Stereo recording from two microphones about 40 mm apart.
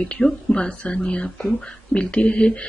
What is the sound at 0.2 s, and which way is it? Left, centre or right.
Speech, left.